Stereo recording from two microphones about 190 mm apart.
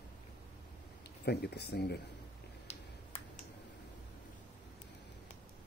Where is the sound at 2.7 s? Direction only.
35° left (ahead or behind).